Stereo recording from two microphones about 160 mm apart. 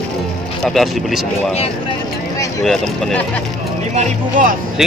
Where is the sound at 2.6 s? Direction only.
Centre (ahead or behind).